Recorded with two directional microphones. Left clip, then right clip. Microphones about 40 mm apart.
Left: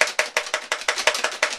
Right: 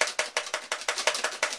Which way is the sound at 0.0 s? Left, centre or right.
Left.